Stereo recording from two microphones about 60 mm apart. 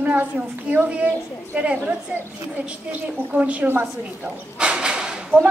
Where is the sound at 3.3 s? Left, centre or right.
Right.